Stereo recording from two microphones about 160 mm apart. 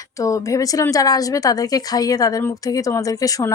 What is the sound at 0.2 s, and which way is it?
A woman's voice, 20° left (ahead or behind).